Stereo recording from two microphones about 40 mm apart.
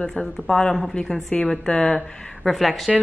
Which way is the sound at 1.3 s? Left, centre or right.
Left.